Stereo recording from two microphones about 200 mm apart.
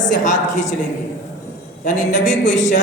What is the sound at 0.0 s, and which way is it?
Speech, 40° left (ahead or behind).